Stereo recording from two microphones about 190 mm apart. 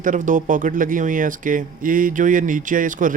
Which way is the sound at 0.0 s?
40° right (ahead or behind).